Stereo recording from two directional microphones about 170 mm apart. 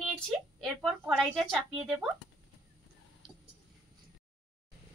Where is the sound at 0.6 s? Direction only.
Centre (ahead or behind).